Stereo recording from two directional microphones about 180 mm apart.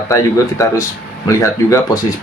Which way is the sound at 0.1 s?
15° left (ahead or behind).